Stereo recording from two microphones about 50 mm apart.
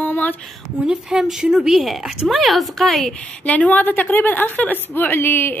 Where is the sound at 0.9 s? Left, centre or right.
Centre.